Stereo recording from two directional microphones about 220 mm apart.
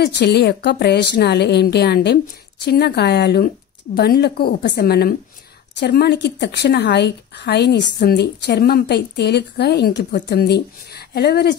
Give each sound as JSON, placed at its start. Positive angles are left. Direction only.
{"t": 0.0, "sound": "a woman's voice", "side_deg": 50}